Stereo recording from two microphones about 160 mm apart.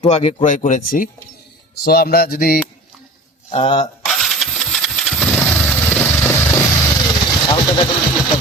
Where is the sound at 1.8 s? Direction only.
75° left (ahead or behind).